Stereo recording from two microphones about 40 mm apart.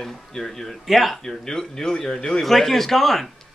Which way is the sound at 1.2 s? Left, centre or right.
Centre.